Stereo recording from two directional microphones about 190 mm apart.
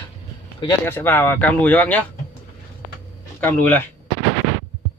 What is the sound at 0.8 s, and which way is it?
Speech, 10° left (ahead or behind).